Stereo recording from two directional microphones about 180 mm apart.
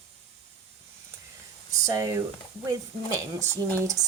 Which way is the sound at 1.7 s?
20° right (ahead or behind).